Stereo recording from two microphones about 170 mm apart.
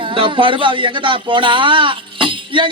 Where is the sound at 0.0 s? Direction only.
30° right (ahead or behind).